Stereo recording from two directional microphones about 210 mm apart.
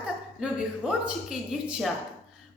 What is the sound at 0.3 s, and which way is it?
Speech, centre (ahead or behind).